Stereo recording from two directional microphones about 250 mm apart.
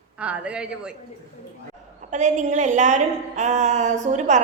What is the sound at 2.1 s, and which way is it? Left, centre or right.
A woman's voice, right.